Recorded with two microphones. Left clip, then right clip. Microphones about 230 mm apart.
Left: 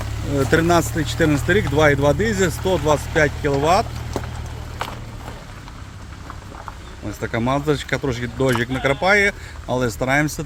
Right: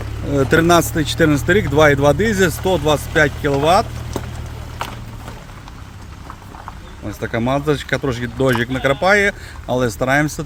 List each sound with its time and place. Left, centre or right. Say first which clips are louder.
0.3 s speech: right 4 dB; right
4.1 s vehicle: right 1 dB; right
4.8 s a sound: right 1 dB; right
7.1 s speech: right 2 dB; centre